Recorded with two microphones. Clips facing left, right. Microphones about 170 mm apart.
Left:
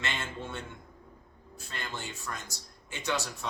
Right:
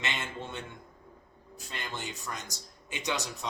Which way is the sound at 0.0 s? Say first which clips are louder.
Even; 20° right (ahead or behind).